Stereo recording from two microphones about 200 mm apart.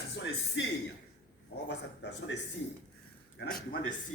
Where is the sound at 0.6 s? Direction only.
65° left (ahead or behind).